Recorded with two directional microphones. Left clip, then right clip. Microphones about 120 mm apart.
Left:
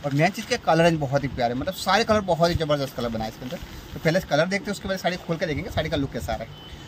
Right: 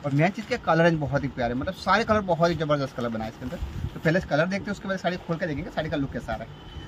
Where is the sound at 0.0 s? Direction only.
40° left (ahead or behind); by 6.4 s 65° left (ahead or behind).